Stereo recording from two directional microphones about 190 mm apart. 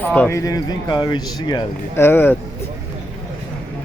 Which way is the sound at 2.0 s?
10° left (ahead or behind).